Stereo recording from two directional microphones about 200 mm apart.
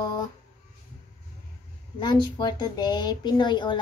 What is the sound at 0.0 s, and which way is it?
Music, 20° left (ahead or behind).